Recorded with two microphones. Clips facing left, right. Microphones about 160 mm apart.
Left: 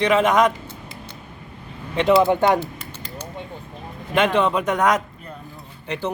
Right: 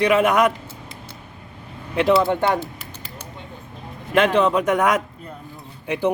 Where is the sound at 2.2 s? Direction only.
20° left (ahead or behind).